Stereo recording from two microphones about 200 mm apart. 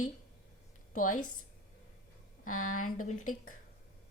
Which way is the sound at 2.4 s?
90° left.